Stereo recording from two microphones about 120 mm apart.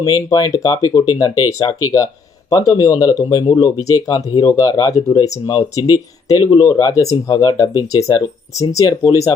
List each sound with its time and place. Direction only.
0.0 s speech: 30° left (ahead or behind)